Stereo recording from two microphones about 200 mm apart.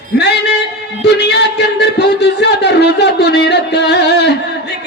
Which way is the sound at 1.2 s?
55° left (ahead or behind).